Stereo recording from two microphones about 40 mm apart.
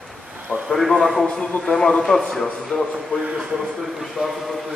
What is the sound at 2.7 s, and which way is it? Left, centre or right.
Speech, left.